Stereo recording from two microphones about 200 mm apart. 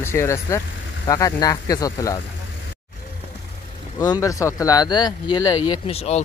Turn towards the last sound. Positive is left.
turn(degrees=30)  # may be behind; listen again after turning